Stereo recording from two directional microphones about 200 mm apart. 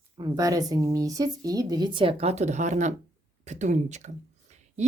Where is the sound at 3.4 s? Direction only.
35° right (ahead or behind).